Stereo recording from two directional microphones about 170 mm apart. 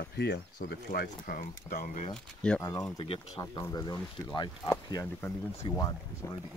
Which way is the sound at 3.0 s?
30° left (ahead or behind).